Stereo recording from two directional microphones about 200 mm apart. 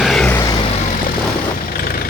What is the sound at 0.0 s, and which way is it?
Vehicle, centre (ahead or behind).